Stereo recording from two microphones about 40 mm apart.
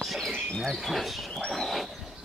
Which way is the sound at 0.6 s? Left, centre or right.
Centre.